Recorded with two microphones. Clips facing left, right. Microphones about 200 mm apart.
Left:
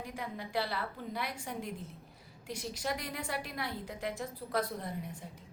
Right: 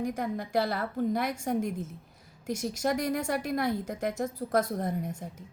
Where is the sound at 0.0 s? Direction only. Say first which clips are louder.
Right 10 dB; 45° right (ahead or behind).